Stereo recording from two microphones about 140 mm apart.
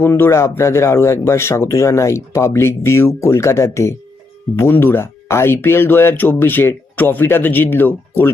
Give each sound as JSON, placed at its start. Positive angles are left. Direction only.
{"t": 0.0, "sound": "speech", "side_deg": 15}